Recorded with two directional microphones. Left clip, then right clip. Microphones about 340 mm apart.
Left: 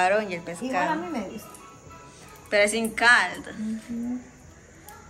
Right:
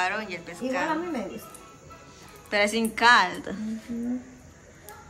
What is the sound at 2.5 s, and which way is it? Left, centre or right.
A woman's voice, centre.